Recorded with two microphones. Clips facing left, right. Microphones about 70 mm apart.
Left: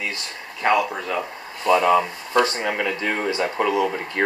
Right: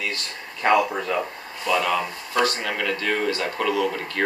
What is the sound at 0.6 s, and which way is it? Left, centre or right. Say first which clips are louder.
Speech: right 1 dB; centre.